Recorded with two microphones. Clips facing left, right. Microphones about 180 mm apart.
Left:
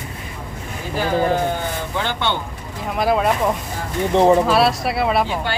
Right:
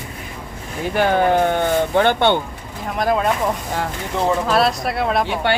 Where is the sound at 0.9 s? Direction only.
65° right (ahead or behind).